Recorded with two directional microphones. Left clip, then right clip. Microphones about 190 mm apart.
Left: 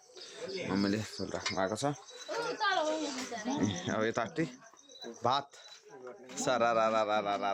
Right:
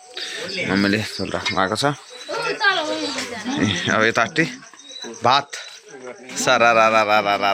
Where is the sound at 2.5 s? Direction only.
20° left (ahead or behind).